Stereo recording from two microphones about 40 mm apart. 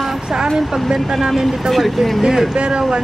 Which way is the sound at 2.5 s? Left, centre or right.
Right.